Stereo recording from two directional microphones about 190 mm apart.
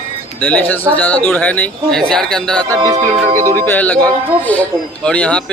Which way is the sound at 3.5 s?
10° left (ahead or behind).